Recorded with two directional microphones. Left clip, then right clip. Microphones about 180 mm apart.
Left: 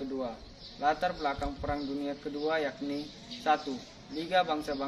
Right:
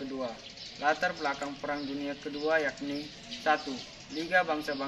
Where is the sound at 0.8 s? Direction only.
15° left (ahead or behind).